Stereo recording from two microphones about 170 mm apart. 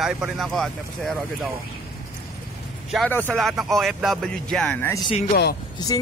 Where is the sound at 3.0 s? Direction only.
10° left (ahead or behind).